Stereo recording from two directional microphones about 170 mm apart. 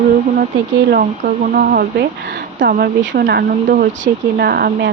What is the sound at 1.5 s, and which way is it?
Speech, 60° right (ahead or behind).